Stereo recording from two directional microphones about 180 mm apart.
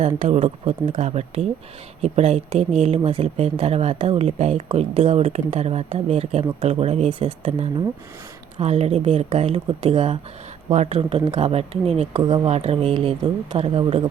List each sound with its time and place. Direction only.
0.2 s speech: 40° right (ahead or behind)
8.5 s speech: 35° right (ahead or behind)